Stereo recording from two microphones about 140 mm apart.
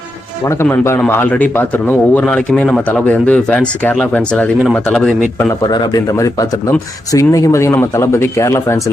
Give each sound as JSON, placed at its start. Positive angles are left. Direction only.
{"t": 0.4, "sound": "speech", "side_deg": 20}
{"t": 5.4, "sound": "speech", "side_deg": 20}